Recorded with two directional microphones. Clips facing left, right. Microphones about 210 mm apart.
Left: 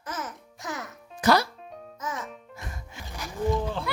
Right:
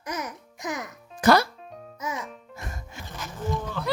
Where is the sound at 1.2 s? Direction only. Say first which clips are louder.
Right 3 dB; 55° right (ahead or behind).